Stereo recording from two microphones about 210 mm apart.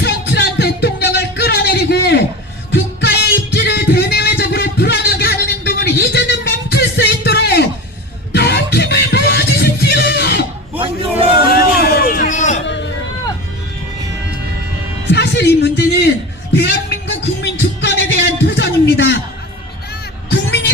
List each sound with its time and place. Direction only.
0.0 s music: 55° left (ahead or behind)
11.4 s music: 45° left (ahead or behind)
15.1 s a sound: 55° left (ahead or behind)
16.6 s music: 50° left (ahead or behind)